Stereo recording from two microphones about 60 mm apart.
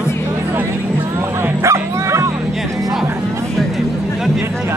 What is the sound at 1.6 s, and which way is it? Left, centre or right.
Bow-wow, right.